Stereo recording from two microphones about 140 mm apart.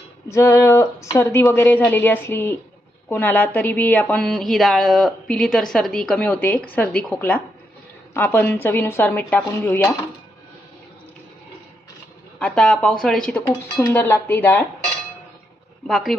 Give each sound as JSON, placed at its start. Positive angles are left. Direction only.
{"t": 0.3, "sound": "speech", "side_deg": 20}
{"t": 12.4, "sound": "speech", "side_deg": 5}
{"t": 15.9, "sound": "speech", "side_deg": 0}